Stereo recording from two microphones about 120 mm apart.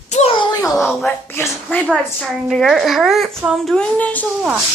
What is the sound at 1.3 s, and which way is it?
Speech, 20° left (ahead or behind).